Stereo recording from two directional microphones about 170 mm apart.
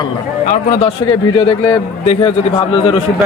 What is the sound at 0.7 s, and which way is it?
Speech, 40° left (ahead or behind).